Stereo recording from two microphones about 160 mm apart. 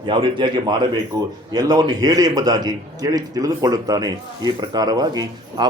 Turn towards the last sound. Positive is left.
turn(degrees=-25)  # may be behind; listen again after turning